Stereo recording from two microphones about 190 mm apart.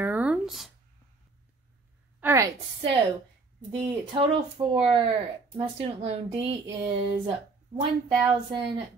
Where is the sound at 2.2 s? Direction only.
15° right (ahead or behind).